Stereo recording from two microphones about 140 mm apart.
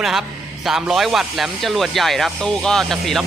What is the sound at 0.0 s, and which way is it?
Speech, centre (ahead or behind).